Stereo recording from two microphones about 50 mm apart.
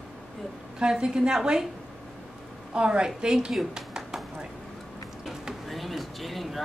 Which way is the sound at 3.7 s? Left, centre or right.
Centre.